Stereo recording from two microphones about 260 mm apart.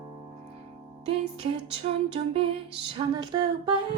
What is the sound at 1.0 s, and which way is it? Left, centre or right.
Music, right.